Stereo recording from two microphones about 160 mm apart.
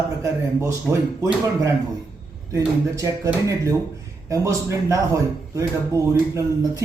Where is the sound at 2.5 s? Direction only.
20° right (ahead or behind).